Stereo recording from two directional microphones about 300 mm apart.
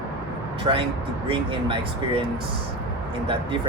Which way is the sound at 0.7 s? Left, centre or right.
Centre.